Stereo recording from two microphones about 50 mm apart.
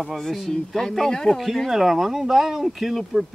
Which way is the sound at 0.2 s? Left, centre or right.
Centre.